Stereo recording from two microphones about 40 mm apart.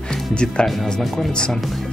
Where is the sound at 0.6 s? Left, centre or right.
Centre.